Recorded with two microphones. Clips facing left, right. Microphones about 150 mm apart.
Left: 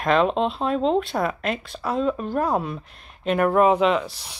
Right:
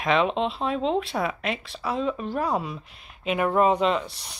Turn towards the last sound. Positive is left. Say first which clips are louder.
# left 3 dB
turn(degrees=0)  # may be behind; listen again after turning